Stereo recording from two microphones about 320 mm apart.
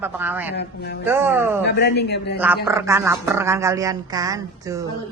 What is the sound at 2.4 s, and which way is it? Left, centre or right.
Speech, centre.